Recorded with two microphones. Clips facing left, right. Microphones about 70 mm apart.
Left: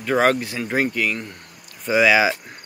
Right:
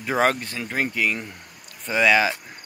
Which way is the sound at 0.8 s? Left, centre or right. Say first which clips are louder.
Left 1 dB; centre.